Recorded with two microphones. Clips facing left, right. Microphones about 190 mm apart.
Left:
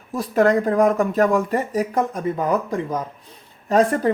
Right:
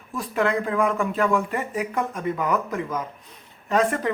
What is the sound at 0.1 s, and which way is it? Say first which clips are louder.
A man's voice: left 6 dB; 40° left (ahead or behind).